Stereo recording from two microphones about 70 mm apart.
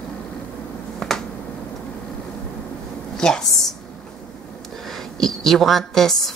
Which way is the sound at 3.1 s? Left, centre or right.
Centre.